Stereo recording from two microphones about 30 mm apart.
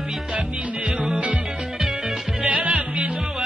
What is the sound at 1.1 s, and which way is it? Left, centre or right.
Music, right.